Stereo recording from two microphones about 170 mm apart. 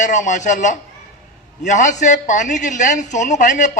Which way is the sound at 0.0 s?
45° left (ahead or behind).